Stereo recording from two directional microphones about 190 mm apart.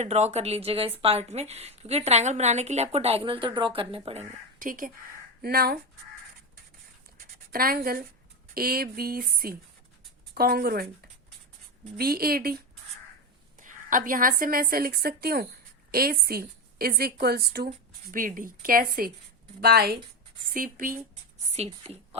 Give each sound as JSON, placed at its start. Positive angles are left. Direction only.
{"t": 0.0, "sound": "a woman's voice", "side_deg": -35}
{"t": 7.2, "sound": "a sound", "side_deg": -50}
{"t": 8.5, "sound": "a woman's voice", "side_deg": -50}
{"t": 11.9, "sound": "a woman's voice", "side_deg": -50}
{"t": 21.5, "sound": "a woman's voice", "side_deg": -35}